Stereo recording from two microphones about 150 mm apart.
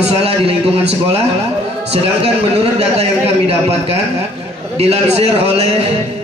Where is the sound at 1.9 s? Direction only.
45° right (ahead or behind).